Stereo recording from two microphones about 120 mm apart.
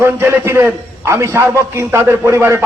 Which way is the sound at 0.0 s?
20° right (ahead or behind).